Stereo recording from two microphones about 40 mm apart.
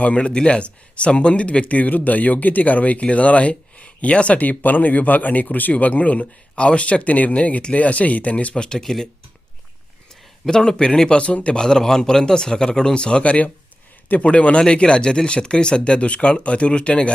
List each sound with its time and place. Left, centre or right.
0.0 s speech: left
1.6 s speech: left
6.6 s speech: left
8.5 s speech: left
8.8 s speech: centre
10.1 s speech: centre
11.6 s speech: centre